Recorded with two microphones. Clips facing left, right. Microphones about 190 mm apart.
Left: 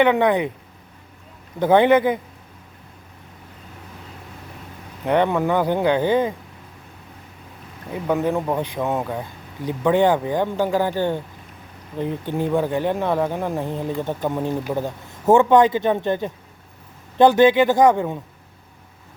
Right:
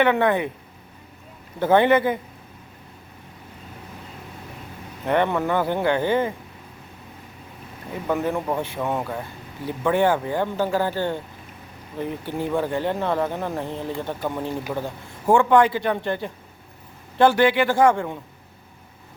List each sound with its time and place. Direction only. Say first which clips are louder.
0.0 s speech: left 2 dB; 15° left (ahead or behind)
1.5 s speech: left 2 dB; 15° left (ahead or behind)
5.0 s speech: left 2 dB; 15° left (ahead or behind)
8.0 s a man's voice: left 3 dB; 15° left (ahead or behind)